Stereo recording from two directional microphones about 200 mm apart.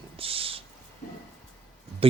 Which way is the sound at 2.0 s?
30° right (ahead or behind).